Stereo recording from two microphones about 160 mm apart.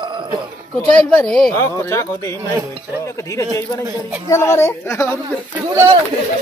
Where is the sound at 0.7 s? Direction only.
5° left (ahead or behind).